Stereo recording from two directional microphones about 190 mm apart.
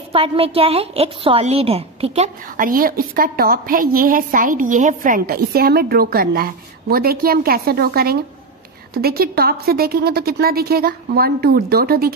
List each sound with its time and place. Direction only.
0.1 s a woman's voice: 30° right (ahead or behind); by 12.1 s 50° right (ahead or behind)